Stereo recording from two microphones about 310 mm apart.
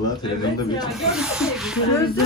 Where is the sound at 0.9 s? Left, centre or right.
Centre.